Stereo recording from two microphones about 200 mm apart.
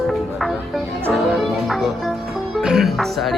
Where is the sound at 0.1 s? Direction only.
Centre (ahead or behind).